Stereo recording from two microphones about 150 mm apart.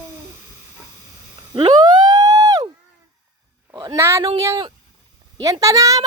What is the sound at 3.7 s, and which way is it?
A child's voice, 25° right (ahead or behind).